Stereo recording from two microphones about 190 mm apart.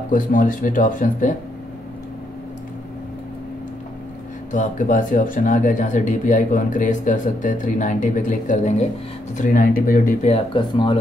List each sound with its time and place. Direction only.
0.1 s speech: 45° left (ahead or behind)
4.5 s speech: 40° left (ahead or behind)
10.2 s speech: 30° left (ahead or behind)